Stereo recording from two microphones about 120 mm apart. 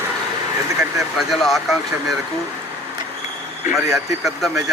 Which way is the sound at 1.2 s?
Centre (ahead or behind).